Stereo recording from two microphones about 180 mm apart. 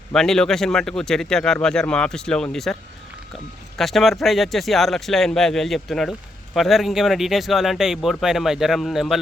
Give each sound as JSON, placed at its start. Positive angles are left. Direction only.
{"t": 0.1, "sound": "speech", "side_deg": 5}
{"t": 3.8, "sound": "speech", "side_deg": 0}